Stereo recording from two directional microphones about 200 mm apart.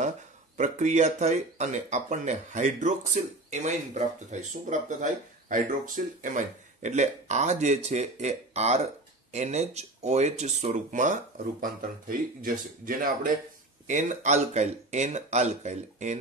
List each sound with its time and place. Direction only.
0.6 s speech: 35° right (ahead or behind)